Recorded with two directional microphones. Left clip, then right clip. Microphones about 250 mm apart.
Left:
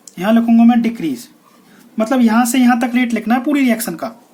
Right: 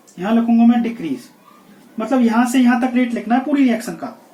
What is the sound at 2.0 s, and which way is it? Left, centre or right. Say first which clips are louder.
Speech: left 1 dB; left.